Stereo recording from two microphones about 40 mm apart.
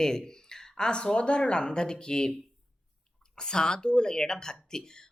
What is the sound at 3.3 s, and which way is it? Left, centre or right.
A woman's voice, centre.